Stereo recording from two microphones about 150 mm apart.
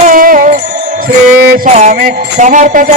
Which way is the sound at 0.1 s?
70° right (ahead or behind).